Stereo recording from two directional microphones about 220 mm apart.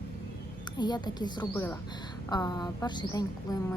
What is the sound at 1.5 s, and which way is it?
A woman's voice, 10° left (ahead or behind).